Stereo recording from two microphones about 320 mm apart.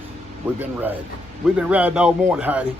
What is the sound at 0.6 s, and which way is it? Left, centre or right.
Speech, centre.